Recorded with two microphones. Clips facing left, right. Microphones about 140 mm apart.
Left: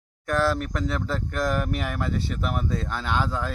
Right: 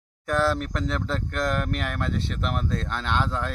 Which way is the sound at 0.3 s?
Centre (ahead or behind).